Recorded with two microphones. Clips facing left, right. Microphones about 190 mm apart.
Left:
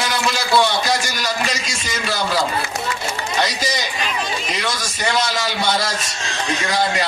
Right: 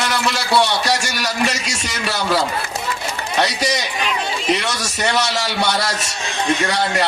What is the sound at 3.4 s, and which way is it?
A man's voice, 70° right (ahead or behind).